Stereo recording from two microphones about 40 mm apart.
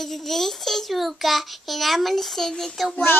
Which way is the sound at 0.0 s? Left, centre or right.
Centre.